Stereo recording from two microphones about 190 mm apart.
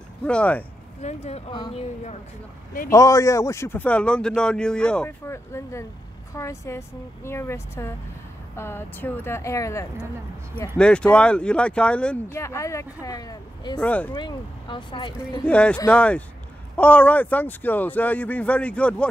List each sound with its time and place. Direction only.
0.2 s speech: 5° left (ahead or behind)
1.0 s speech: 35° left (ahead or behind)
1.5 s speech: 25° left (ahead or behind)
2.9 s speech: 15° left (ahead or behind)
13.7 s speech: 10° left (ahead or behind)
14.1 s speech: 25° left (ahead or behind)
15.4 s speech: 5° left (ahead or behind)